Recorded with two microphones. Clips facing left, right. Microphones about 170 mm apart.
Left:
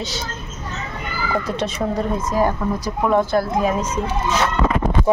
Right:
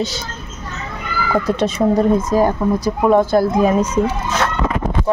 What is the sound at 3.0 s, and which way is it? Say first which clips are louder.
Speech: right 4 dB; 20° right (ahead or behind).